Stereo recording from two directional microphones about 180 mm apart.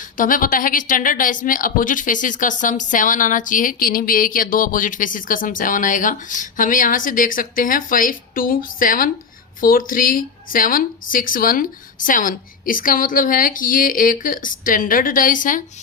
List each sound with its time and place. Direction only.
0.2 s a woman's voice: 50° left (ahead or behind)